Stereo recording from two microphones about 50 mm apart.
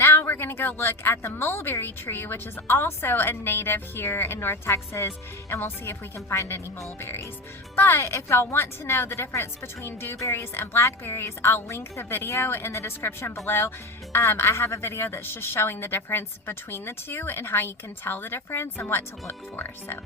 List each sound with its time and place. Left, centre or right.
0.0 s a sound: left
0.8 s a woman's voice: left
4.7 s a woman's voice: left
6.1 s speech: left
7.8 s a woman's voice: left
10.2 s a woman's voice: left
10.5 s a woman's voice: left